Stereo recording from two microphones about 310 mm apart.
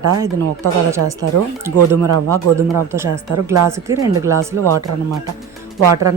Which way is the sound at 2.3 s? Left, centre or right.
Centre.